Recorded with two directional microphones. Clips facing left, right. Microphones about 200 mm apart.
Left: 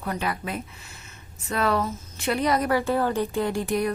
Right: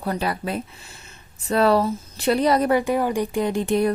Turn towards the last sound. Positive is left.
turn(degrees=-30)  # may be behind; listen again after turning